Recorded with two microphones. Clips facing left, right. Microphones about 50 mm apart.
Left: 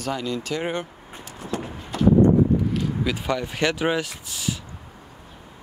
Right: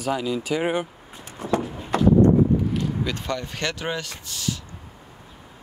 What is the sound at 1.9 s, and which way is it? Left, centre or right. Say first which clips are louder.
Clip-clop: right 1 dB; right.